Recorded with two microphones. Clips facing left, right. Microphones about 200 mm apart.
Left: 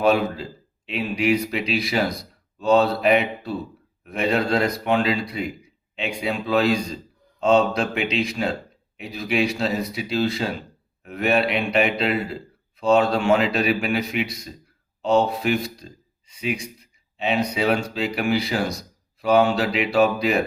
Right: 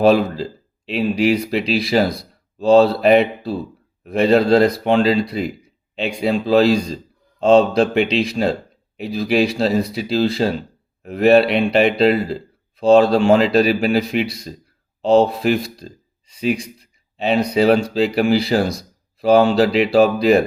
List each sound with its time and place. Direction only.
0.0 s a man's voice: 35° right (ahead or behind)